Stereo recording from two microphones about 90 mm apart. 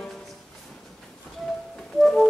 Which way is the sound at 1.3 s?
5° left (ahead or behind).